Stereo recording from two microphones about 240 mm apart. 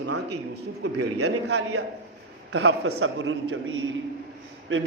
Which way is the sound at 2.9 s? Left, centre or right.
Right.